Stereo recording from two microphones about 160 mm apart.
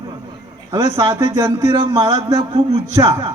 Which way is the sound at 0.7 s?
25° right (ahead or behind).